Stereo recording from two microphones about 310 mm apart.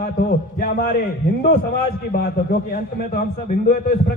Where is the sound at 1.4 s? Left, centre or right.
Left.